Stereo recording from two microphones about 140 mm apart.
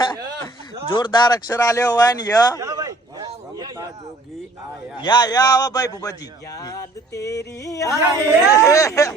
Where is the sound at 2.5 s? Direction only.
25° right (ahead or behind).